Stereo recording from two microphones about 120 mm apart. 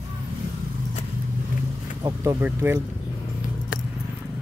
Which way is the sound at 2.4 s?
15° right (ahead or behind).